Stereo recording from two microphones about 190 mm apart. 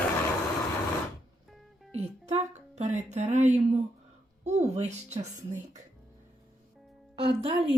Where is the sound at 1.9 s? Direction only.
35° right (ahead or behind).